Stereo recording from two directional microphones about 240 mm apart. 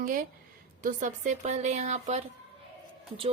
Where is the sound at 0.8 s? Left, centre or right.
Right.